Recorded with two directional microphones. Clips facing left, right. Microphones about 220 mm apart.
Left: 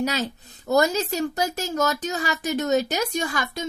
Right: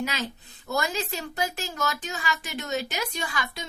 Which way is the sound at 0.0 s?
40° left (ahead or behind).